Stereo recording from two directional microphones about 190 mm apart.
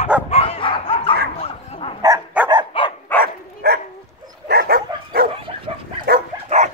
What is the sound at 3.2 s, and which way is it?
Dog, 60° right (ahead or behind).